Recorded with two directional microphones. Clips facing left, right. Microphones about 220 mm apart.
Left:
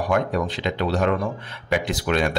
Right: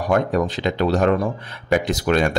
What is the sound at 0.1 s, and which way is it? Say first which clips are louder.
Speech: right 5 dB; 45° right (ahead or behind).